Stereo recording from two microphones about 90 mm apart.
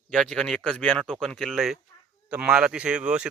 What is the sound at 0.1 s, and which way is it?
Speech, 10° left (ahead or behind).